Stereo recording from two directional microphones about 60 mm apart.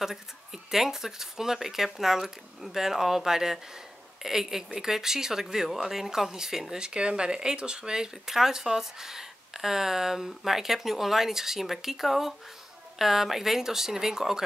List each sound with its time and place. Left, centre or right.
0.0 s speech: centre